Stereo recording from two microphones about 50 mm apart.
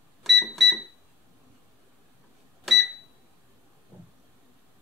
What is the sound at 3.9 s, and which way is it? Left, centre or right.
Vehicle, left.